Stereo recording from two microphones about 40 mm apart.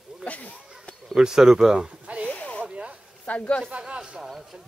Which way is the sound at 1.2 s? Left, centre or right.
Centre.